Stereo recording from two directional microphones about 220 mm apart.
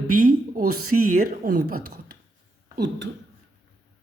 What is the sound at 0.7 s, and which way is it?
Speech, 85° right.